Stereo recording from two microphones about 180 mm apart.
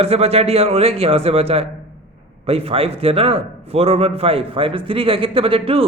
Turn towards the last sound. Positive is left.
turn(degrees=-30)  # may be behind; listen again after turning